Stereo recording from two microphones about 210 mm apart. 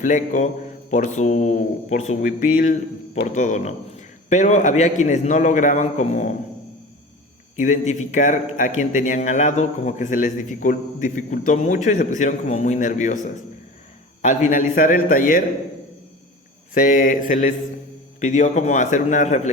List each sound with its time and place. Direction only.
0.0 s a man's voice: 40° left (ahead or behind)
7.6 s a man's voice: 35° left (ahead or behind)
14.2 s a man's voice: 35° left (ahead or behind)
16.7 s a man's voice: 40° left (ahead or behind)